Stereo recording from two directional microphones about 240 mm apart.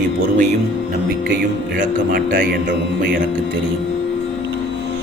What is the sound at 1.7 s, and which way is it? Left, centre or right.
A man's voice, right.